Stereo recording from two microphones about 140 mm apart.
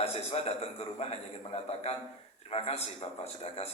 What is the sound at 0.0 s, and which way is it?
A man's voice, 45° left (ahead or behind).